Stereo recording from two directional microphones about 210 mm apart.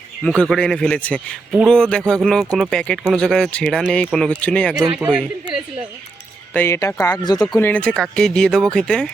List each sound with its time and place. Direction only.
0.3 s a man's voice: 5° left (ahead or behind)
6.5 s a man's voice: 10° left (ahead or behind)